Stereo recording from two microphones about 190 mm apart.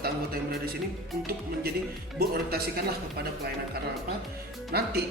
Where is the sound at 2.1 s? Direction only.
55° right (ahead or behind).